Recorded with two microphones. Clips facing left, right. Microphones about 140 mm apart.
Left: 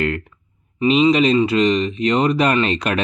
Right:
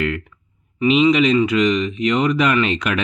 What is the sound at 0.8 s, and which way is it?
Speech, 30° left (ahead or behind).